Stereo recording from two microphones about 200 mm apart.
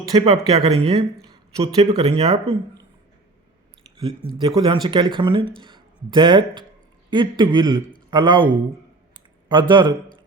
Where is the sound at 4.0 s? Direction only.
25° right (ahead or behind).